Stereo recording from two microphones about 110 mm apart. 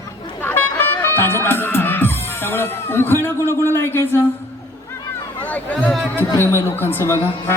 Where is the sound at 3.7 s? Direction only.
20° left (ahead or behind).